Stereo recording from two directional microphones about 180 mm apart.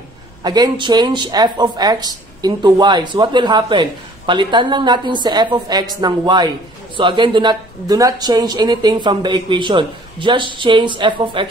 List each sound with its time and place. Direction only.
0.4 s speech: 25° right (ahead or behind)